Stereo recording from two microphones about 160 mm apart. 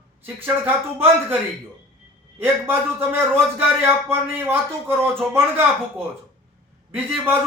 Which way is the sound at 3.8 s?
15° right (ahead or behind).